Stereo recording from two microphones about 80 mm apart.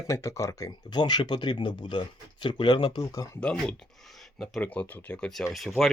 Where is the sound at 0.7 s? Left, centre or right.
Left.